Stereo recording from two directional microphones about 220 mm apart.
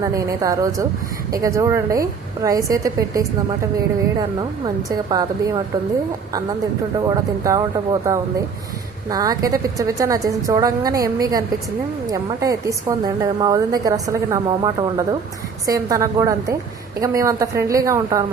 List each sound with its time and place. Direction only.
0.0 s a woman's voice: 15° right (ahead or behind)
7.1 s a woman's voice: 15° right (ahead or behind)